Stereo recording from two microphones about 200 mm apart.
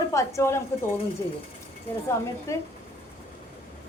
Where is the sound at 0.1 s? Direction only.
15° left (ahead or behind).